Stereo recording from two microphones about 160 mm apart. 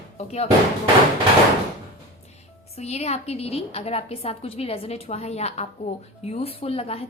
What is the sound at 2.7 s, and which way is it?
A woman's voice, 40° left (ahead or behind).